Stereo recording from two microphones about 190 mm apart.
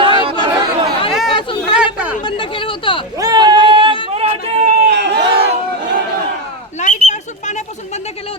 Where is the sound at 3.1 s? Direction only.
20° right (ahead or behind).